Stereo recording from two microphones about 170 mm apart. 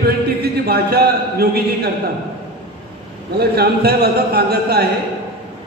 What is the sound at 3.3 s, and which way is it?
A man's voice, 70° right (ahead or behind).